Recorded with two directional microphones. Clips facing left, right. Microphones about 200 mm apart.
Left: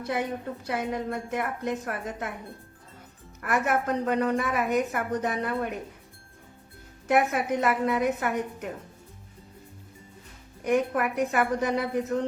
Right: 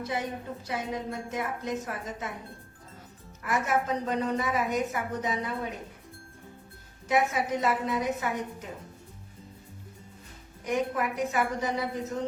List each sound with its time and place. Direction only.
0.0 s a woman's voice: 60° left (ahead or behind)
3.4 s a woman's voice: 60° left (ahead or behind)
7.1 s a woman's voice: 60° left (ahead or behind)
10.6 s a woman's voice: 60° left (ahead or behind)